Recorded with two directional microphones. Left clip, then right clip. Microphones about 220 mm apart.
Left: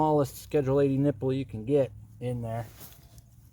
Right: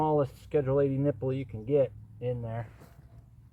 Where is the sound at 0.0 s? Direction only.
45° left (ahead or behind).